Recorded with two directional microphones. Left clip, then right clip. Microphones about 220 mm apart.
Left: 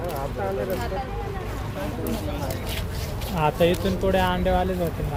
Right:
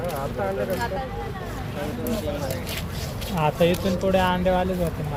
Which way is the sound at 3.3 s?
10° left (ahead or behind).